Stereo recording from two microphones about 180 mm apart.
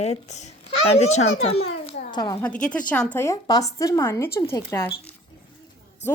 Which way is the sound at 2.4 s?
5° left (ahead or behind).